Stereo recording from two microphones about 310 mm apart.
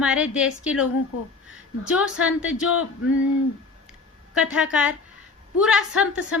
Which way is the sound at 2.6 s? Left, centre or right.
Left.